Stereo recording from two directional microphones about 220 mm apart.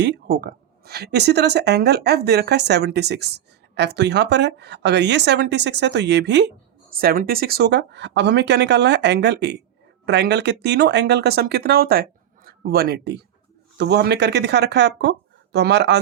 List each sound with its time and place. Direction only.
0.0 s speech: 50° right (ahead or behind)